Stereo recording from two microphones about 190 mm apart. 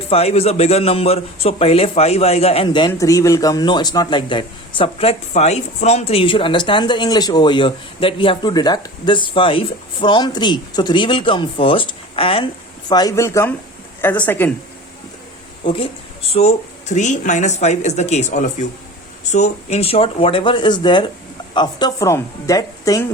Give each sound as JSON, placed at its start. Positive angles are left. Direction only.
{"t": 0.1, "sound": "a man's voice", "side_deg": 30}
{"t": 15.6, "sound": "a man's voice", "side_deg": 30}